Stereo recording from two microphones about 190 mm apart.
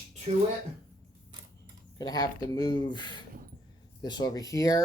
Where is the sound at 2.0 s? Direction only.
20° left (ahead or behind).